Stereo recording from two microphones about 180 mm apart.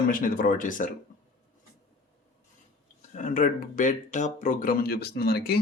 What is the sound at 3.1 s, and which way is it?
Speech, 45° left (ahead or behind).